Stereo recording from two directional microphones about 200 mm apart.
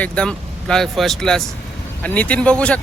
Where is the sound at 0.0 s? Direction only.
5° left (ahead or behind).